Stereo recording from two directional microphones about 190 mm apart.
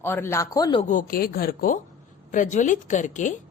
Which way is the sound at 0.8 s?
45° left (ahead or behind).